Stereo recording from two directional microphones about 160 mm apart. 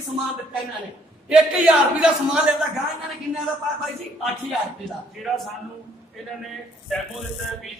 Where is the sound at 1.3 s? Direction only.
5° right (ahead or behind).